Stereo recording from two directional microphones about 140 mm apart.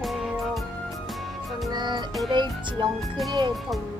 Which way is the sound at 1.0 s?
Centre (ahead or behind).